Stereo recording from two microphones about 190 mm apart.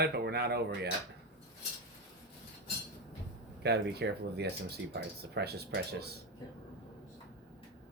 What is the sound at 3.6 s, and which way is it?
Speech, 60° right (ahead or behind).